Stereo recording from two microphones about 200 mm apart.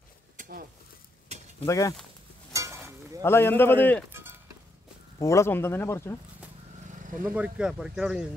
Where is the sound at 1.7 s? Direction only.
15° left (ahead or behind).